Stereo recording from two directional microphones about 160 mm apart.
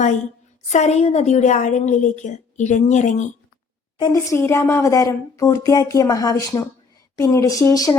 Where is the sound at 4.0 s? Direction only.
20° left (ahead or behind).